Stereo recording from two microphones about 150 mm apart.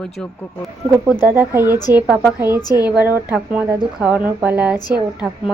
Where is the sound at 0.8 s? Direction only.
15° right (ahead or behind).